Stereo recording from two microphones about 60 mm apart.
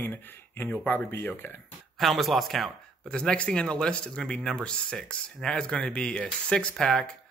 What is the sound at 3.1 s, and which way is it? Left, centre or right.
Speech, centre.